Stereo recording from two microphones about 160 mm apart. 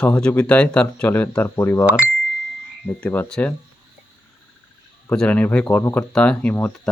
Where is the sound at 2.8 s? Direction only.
10° left (ahead or behind).